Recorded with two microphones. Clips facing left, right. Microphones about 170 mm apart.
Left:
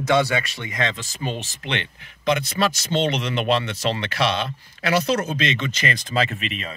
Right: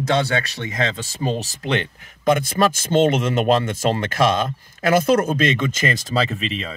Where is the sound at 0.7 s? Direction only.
30° right (ahead or behind).